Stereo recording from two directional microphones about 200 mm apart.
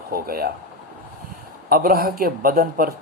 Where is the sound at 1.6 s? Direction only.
50° right (ahead or behind).